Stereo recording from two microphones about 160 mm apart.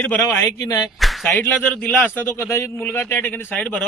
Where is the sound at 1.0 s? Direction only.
Centre (ahead or behind).